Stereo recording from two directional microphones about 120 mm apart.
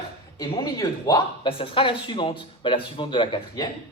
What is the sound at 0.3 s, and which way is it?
Speech, 35° left (ahead or behind).